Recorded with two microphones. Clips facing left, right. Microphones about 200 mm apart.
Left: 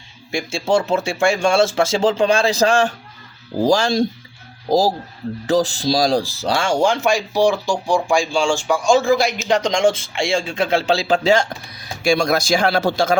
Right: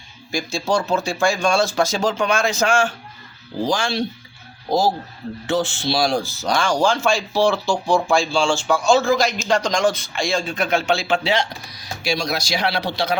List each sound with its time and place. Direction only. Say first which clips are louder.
0.3 s speech: left 3 dB; 25° left (ahead or behind); by 13.1 s 45° left (ahead or behind)